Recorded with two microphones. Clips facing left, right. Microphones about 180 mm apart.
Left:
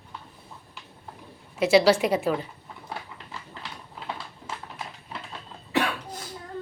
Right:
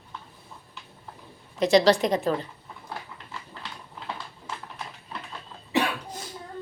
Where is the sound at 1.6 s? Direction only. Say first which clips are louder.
Even; 5° left (ahead or behind).